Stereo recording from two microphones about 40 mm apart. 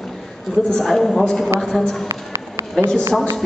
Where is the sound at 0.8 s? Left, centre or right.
Centre.